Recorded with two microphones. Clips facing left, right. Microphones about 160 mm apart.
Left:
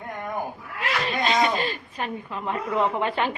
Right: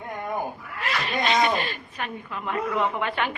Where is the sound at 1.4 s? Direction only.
30° left (ahead or behind).